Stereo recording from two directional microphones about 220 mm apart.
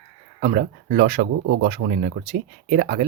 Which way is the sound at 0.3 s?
40° right (ahead or behind).